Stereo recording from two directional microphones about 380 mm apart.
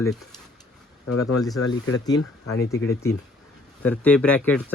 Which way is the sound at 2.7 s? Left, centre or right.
Centre.